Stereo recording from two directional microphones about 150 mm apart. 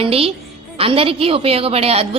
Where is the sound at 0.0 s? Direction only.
40° right (ahead or behind).